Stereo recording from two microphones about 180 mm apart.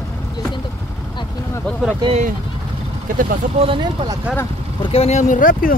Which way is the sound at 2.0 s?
30° right (ahead or behind).